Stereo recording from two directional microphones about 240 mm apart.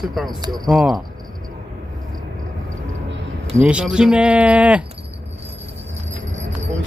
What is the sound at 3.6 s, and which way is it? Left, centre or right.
Speech, centre.